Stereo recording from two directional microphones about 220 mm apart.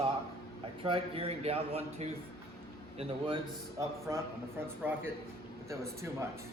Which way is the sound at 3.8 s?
15° right (ahead or behind).